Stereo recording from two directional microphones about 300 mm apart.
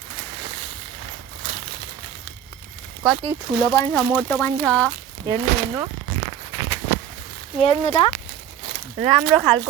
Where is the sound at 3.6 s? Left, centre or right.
Centre.